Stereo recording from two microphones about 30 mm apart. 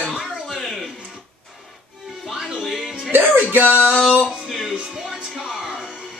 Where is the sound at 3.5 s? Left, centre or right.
Right.